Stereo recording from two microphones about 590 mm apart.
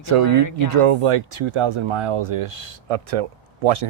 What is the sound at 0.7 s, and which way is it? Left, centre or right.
Speech, right.